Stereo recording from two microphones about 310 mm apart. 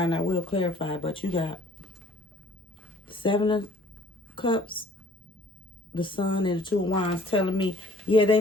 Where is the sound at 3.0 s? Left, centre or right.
Centre.